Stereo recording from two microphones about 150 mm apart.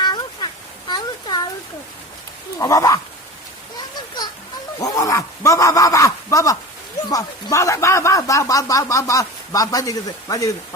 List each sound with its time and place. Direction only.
0.0 s a sound: 30° left (ahead or behind)
2.6 s speech: 25° left (ahead or behind)
4.8 s speech: 20° left (ahead or behind)